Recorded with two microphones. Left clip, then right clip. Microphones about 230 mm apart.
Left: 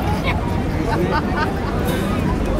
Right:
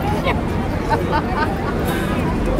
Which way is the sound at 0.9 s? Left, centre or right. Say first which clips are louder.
Right 2 dB; right.